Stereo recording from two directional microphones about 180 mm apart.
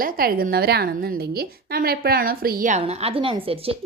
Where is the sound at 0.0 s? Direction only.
55° right (ahead or behind).